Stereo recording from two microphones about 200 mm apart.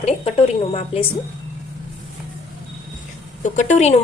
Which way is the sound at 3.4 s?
35° left (ahead or behind).